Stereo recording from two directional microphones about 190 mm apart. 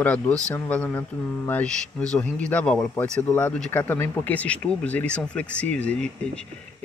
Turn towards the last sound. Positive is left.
turn(degrees=5)  # may be behind; listen again after turning